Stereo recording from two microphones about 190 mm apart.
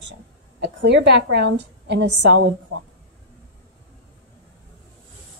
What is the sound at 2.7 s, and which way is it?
Speech, 85° right.